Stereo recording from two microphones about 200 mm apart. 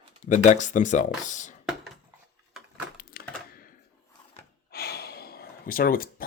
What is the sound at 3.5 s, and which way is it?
Typewriter, 45° left (ahead or behind).